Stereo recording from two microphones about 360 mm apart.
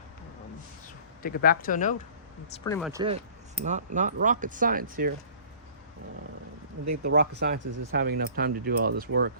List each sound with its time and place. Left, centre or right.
1.2 s speech: left
2.6 s speech: centre
2.9 s speech: centre
7.0 s speech: right
7.7 s speech: right
7.9 s speech: right